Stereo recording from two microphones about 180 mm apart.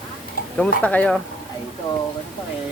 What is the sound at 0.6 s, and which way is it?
Speech, 5° left (ahead or behind).